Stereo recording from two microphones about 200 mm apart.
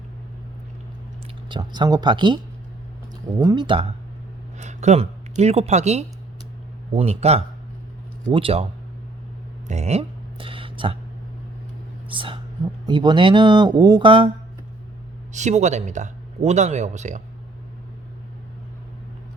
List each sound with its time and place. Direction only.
1.5 s speech: 20° right (ahead or behind)
3.4 s speech: 20° right (ahead or behind)
9.6 s a sound: 35° right (ahead or behind)
12.0 s whispering: 25° right (ahead or behind)
12.8 s speech: 20° right (ahead or behind)
15.3 s speech: 35° right (ahead or behind)